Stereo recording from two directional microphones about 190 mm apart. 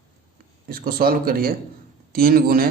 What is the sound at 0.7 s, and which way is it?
A man's voice, 50° right (ahead or behind).